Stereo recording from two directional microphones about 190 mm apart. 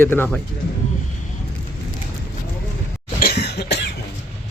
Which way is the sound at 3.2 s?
55° left (ahead or behind).